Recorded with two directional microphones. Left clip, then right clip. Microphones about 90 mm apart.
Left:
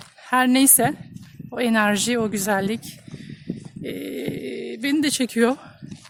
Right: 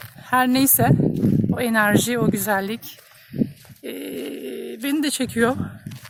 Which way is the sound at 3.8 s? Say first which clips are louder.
Even; 25° left (ahead or behind).